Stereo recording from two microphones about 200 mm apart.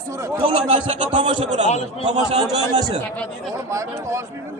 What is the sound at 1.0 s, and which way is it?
Speech, 35° right (ahead or behind).